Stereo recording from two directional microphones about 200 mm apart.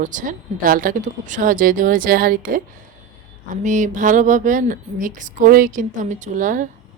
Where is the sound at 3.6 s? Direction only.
40° right (ahead or behind).